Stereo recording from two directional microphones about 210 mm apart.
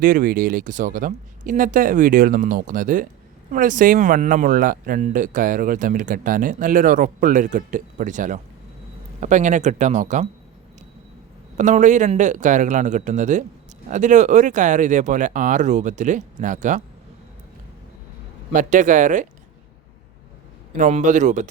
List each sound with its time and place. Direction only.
0.0 s speech: 40° right (ahead or behind)
11.5 s speech: 35° right (ahead or behind)
18.5 s speech: 35° right (ahead or behind)
20.7 s speech: 35° right (ahead or behind)